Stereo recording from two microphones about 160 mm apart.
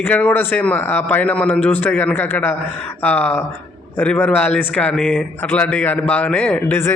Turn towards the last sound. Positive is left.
turn(degrees=15)  # may be behind; listen again after turning